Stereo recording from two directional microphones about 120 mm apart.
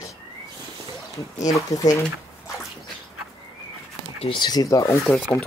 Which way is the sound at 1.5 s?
30° left (ahead or behind).